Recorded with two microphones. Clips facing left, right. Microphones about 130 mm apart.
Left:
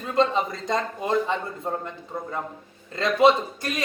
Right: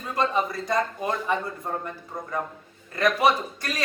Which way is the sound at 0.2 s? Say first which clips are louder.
Left 3 dB; 25° left (ahead or behind).